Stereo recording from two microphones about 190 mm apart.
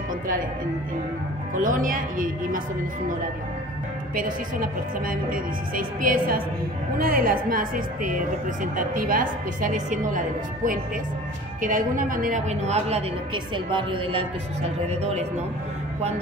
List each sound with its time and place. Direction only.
1.5 s speech: 45° right (ahead or behind)
4.1 s a woman's voice: 45° right (ahead or behind)